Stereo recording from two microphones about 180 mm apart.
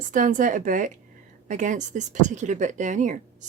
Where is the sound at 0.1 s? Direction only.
45° right (ahead or behind).